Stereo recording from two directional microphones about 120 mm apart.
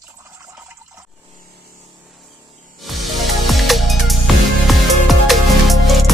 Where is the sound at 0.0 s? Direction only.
25° right (ahead or behind).